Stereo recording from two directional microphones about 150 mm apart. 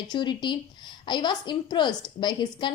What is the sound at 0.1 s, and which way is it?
A woman's voice, 30° left (ahead or behind).